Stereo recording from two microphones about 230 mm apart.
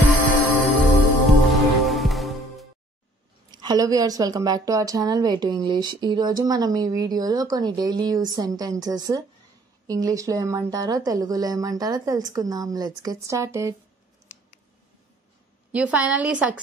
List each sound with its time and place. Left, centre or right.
0.7 s music: centre
3.5 s a woman's voice: centre
15.7 s a woman's voice: centre